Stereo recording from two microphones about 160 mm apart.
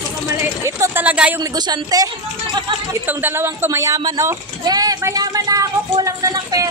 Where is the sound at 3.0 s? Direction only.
15° right (ahead or behind).